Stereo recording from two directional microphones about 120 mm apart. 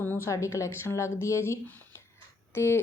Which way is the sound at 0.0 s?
20° left (ahead or behind).